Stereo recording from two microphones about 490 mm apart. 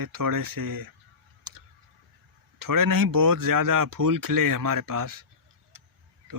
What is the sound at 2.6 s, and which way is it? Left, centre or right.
Speech, right.